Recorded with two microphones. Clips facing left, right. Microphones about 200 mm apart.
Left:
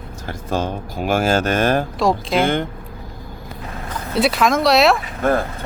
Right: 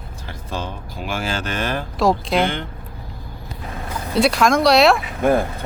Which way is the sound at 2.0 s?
Centre (ahead or behind).